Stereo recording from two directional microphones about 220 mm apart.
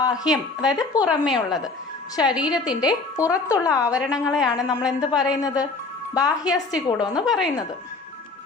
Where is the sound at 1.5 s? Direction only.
15° left (ahead or behind).